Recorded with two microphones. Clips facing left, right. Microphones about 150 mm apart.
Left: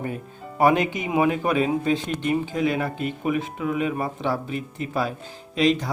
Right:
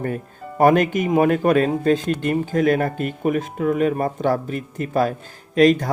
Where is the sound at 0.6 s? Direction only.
50° right (ahead or behind).